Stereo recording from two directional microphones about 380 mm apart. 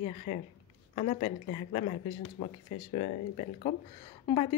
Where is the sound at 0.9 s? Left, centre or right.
Centre.